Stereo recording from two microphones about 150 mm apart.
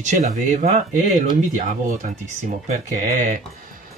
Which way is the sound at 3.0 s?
55° right (ahead or behind).